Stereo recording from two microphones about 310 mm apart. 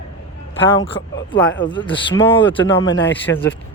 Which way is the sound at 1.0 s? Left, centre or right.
Left.